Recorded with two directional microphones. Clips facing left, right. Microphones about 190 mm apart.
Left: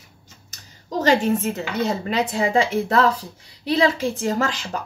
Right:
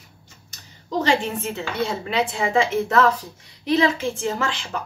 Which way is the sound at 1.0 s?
40° left (ahead or behind).